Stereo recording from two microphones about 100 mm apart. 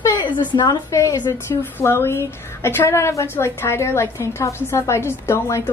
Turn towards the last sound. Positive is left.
turn(degrees=25)  # may be behind; listen again after turning